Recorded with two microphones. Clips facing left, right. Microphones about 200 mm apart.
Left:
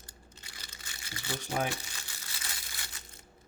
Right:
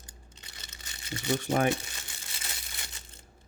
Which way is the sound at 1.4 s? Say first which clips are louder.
Right 6 dB; 60° right (ahead or behind).